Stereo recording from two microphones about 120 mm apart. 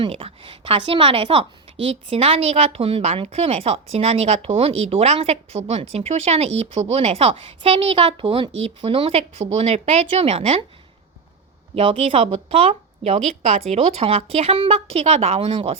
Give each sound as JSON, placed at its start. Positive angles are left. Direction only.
{"t": 0.1, "sound": "a woman's voice", "side_deg": -55}
{"t": 9.4, "sound": "a woman's voice", "side_deg": -60}
{"t": 11.7, "sound": "speech", "side_deg": -50}